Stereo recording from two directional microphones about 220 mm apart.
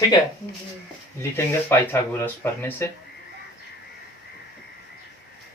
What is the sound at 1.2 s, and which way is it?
Speech, 10° left (ahead or behind).